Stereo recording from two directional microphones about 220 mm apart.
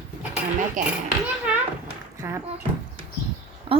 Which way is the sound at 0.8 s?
35° right (ahead or behind).